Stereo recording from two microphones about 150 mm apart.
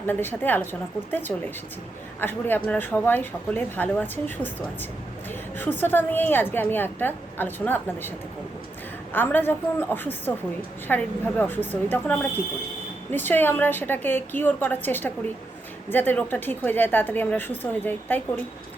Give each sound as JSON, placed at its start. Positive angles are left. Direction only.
{"t": 0.1, "sound": "a woman's voice", "side_deg": 15}
{"t": 9.1, "sound": "a woman's voice", "side_deg": 15}